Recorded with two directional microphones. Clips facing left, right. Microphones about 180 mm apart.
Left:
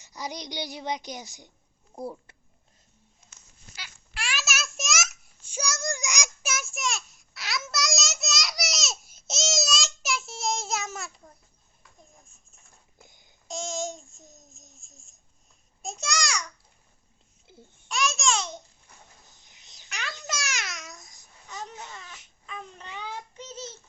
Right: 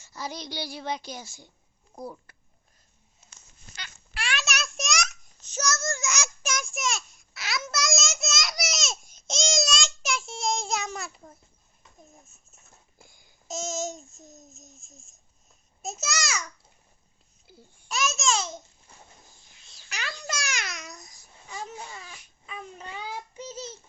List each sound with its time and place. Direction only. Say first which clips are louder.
0.0 s a child's voice: even; 15° left (ahead or behind)
3.8 s a sound: right 1 dB; 5° left (ahead or behind)
12.2 s bird: right 2 dB; 5° right (ahead or behind)
13.0 s babbling: left 3 dB; 20° left (ahead or behind)
13.5 s babbling: right 1 dB; centre (ahead or behind)
17.4 s baby cry: left 1 dB; 20° left (ahead or behind)
17.8 s babbling: even; centre (ahead or behind)
19.4 s a sound: even; 20° left (ahead or behind)
19.9 s babbling: right 1 dB; centre (ahead or behind)
22.4 s a sound: right 1 dB; 10° right (ahead or behind)
23.0 s child singing: even; 10° right (ahead or behind)